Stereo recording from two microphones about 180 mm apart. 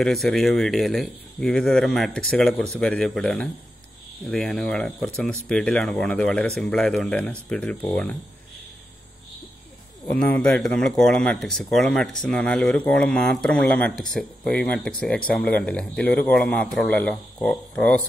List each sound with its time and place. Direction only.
0.0 s speech: centre (ahead or behind)
10.0 s a man's voice: 10° left (ahead or behind)